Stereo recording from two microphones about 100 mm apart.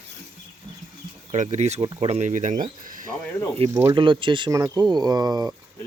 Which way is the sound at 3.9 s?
55° right (ahead or behind).